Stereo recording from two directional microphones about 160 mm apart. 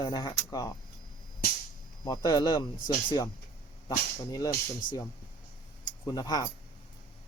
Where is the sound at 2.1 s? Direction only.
25° left (ahead or behind).